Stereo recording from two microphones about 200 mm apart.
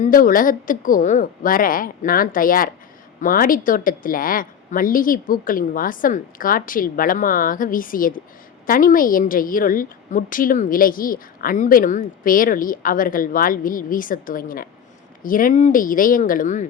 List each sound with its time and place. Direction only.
0.0 s a woman's voice: 45° left (ahead or behind)